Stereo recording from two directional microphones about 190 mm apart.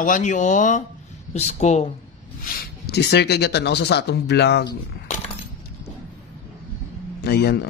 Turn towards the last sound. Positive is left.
turn(degrees=60)  # may be behind; listen again after turning